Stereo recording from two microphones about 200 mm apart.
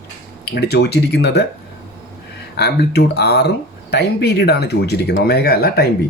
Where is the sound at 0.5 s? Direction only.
55° left (ahead or behind).